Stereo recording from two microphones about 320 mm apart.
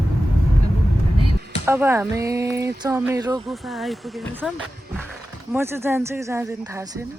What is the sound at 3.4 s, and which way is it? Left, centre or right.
Speech, centre.